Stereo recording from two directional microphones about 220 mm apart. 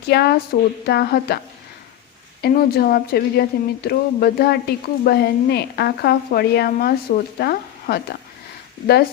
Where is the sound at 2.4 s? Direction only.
45° left (ahead or behind).